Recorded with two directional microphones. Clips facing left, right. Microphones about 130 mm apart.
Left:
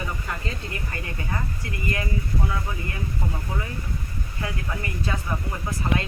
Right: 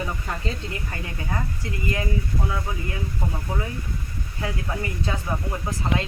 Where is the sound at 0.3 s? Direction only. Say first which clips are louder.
Right 2 dB; 20° right (ahead or behind).